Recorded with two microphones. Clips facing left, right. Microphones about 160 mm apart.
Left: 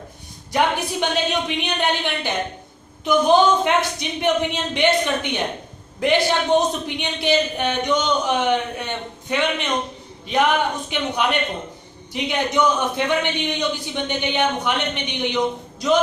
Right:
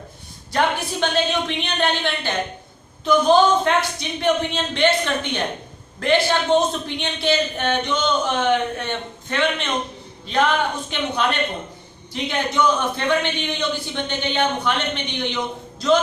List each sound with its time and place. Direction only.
0.5 s a man's voice: 15° left (ahead or behind)